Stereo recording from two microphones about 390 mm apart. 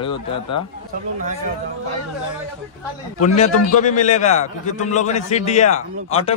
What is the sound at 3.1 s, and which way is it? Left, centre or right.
A man's voice, centre.